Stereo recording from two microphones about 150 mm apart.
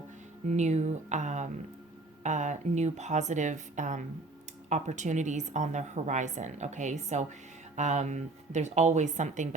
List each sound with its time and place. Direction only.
0.4 s a woman's voice: 50° right (ahead or behind)